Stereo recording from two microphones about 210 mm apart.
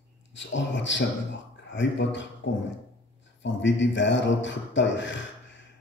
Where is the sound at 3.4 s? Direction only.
60° left (ahead or behind).